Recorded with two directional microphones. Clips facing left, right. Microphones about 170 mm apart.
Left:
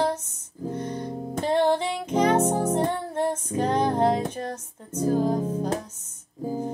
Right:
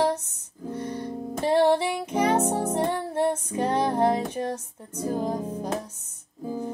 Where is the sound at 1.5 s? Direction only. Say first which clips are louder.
Right 2 dB; 10° right (ahead or behind).